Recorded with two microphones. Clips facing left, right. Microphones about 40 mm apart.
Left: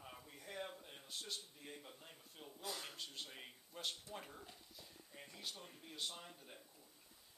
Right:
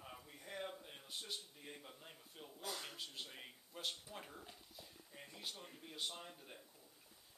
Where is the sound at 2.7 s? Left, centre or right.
Centre.